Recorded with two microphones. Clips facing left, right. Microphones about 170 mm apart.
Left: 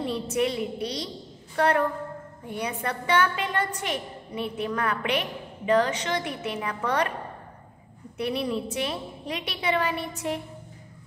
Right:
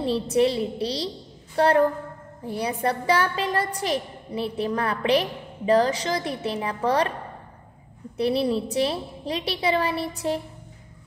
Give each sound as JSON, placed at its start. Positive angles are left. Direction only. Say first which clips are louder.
{"t": 0.0, "sound": "a woman's voice", "louder": "right 5 dB", "side_deg": -30}
{"t": 8.2, "sound": "a woman's voice", "louder": "right 5 dB", "side_deg": -30}